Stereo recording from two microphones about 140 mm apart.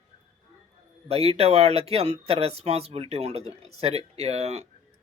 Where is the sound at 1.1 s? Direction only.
45° right (ahead or behind).